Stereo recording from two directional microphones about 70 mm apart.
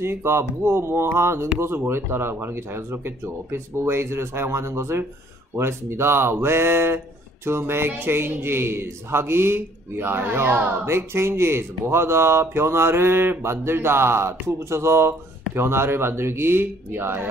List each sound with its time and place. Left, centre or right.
0.0 s speech: right